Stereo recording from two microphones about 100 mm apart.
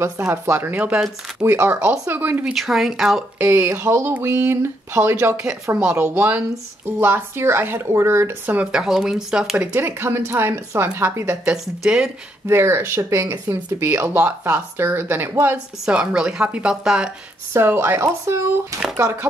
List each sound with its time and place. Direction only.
0.0 s speech: 25° right (ahead or behind)
2.4 s speech: centre (ahead or behind)
3.3 s speech: 25° right (ahead or behind)
5.8 s a woman's voice: 10° right (ahead or behind)
8.7 s a woman's voice: 5° right (ahead or behind)
9.7 s speech: 25° right (ahead or behind)
11.4 s speech: 5° right (ahead or behind)
12.4 s speech: 25° right (ahead or behind)
14.0 s speech: 15° right (ahead or behind)
15.8 s a woman's voice: 10° right (ahead or behind)
17.5 s speech: 25° right (ahead or behind)